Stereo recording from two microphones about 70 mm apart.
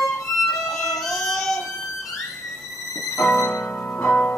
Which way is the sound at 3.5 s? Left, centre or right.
Left.